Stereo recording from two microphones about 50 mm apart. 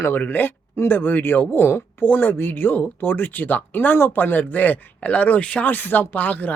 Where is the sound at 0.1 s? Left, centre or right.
Left.